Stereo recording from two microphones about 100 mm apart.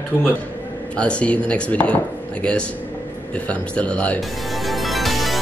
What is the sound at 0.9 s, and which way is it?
Speech, 10° left (ahead or behind).